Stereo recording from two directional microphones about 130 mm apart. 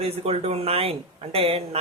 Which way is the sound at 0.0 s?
50° right (ahead or behind).